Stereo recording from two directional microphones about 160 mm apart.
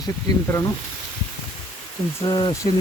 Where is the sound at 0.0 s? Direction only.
20° left (ahead or behind).